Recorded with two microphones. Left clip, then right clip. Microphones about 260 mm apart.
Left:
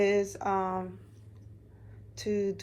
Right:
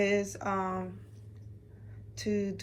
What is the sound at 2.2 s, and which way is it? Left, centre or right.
Speech, left.